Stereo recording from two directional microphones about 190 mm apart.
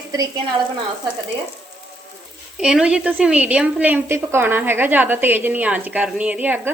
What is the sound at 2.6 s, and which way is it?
A woman's voice, 5° right (ahead or behind).